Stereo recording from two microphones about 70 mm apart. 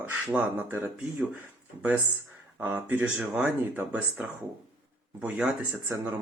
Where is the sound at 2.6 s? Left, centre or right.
Right.